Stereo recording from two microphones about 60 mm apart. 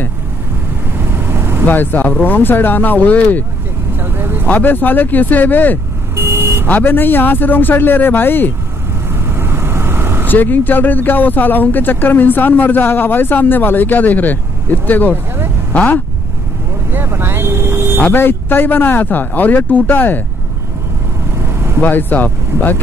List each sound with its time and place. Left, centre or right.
0.9 s vehicle: right
1.7 s speech: left
4.0 s vehicle: right
4.5 s speech: left
6.1 s vehicle: right
6.7 s speech: left
9.1 s vehicle: right
10.2 s speech: left
16.9 s vehicle: right
18.0 s speech: left
21.4 s vehicle: right
21.8 s speech: left